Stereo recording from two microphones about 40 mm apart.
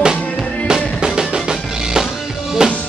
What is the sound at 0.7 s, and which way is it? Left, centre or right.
Music, centre.